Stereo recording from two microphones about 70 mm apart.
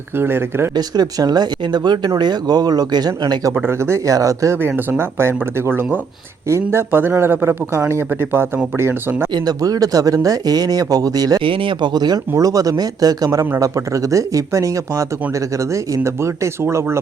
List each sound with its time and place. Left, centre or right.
0.2 s a man's voice: right
0.8 s speech: right
3.7 s speech: right
4.9 s a man's voice: right
9.3 s speech: right
12.4 s speech: right